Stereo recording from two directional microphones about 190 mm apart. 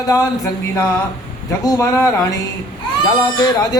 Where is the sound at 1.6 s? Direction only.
15° left (ahead or behind).